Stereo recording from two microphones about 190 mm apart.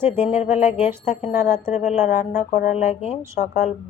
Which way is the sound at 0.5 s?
10° right (ahead or behind).